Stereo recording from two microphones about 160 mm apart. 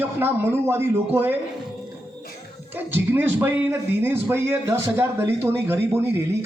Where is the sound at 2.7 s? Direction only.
15° right (ahead or behind).